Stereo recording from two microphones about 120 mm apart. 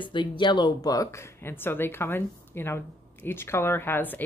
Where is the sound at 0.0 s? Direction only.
40° left (ahead or behind).